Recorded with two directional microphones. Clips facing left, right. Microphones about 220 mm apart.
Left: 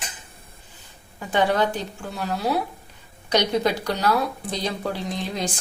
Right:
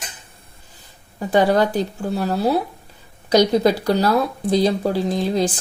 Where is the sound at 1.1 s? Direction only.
40° right (ahead or behind).